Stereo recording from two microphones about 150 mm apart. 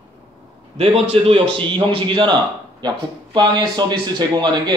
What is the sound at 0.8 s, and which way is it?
A man's voice, 40° right (ahead or behind).